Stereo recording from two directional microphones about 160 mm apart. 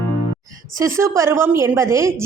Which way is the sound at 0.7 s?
20° right (ahead or behind).